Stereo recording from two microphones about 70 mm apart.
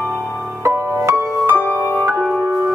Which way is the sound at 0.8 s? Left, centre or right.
Right.